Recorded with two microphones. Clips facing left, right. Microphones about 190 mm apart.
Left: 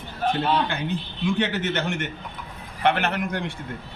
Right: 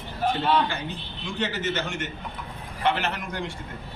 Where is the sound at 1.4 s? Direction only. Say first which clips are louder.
Left 3 dB; 60° left (ahead or behind).